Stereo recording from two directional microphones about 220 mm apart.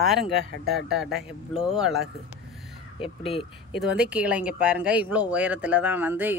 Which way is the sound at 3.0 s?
25° left (ahead or behind).